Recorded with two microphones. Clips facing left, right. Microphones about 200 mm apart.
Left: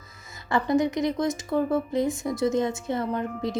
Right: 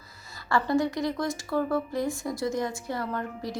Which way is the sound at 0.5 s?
20° left (ahead or behind).